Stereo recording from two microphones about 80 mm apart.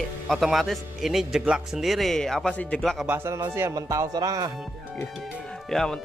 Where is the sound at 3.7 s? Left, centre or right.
Right.